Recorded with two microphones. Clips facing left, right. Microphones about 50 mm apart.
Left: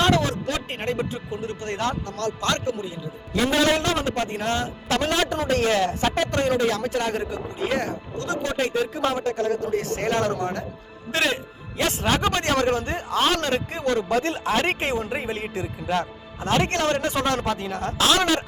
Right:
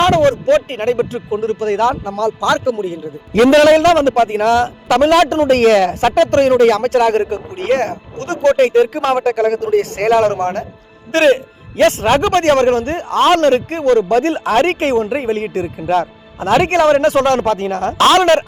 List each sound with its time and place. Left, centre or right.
0.0 s speech: right
1.1 s a man's voice: right
3.3 s a man's voice: right
5.5 s a man's voice: right
6.6 s a man's voice: right
12.1 s a man's voice: right
14.1 s a man's voice: right
15.9 s speech: right
18.0 s a man's voice: right